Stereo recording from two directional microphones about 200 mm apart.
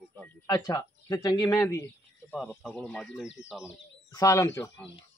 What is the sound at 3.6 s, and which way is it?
Speech, 15° left (ahead or behind).